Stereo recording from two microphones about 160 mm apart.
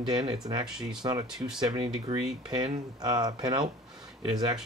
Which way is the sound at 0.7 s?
5° right (ahead or behind).